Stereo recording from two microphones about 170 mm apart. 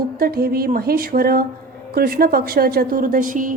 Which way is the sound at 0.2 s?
65° right (ahead or behind).